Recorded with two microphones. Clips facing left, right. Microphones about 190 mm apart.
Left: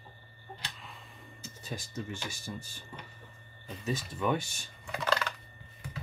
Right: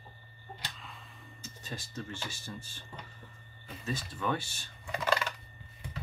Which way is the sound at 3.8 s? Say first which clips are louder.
Left 3 dB; 15° left (ahead or behind).